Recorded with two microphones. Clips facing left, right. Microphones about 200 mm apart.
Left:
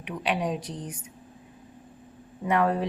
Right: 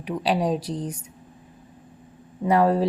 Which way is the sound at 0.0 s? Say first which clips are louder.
Right 5 dB; 35° right (ahead or behind).